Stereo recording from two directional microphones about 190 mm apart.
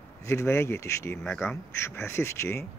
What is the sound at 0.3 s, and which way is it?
Speech, 15° left (ahead or behind).